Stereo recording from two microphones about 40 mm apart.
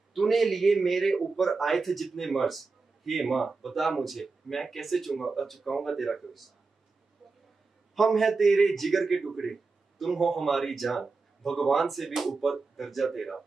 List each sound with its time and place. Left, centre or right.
0.1 s speech: centre
7.9 s speech: centre